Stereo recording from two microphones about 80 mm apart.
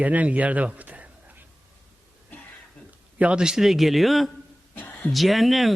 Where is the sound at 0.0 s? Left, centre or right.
Centre.